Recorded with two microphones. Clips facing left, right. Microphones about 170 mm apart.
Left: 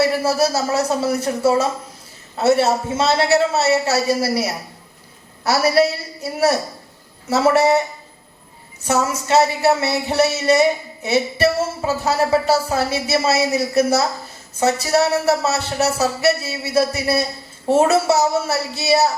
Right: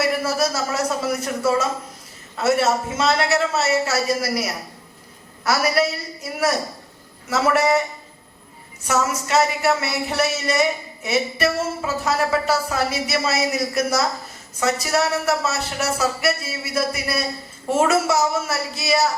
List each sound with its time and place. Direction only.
0.0 s speech: 30° left (ahead or behind)
8.8 s speech: 30° left (ahead or behind)